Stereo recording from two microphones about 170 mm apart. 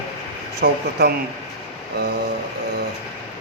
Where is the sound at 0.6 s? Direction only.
70° right (ahead or behind).